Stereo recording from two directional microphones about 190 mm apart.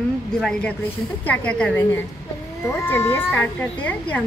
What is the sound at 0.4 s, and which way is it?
A woman's voice, 5° left (ahead or behind).